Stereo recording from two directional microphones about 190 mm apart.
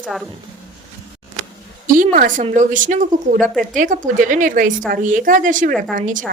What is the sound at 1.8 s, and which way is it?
A woman's voice, 45° right (ahead or behind).